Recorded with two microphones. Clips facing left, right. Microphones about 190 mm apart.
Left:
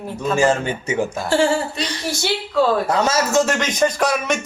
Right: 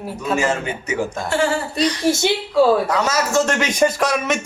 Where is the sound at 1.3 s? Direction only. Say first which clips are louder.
Left 3 dB; 30° left (ahead or behind).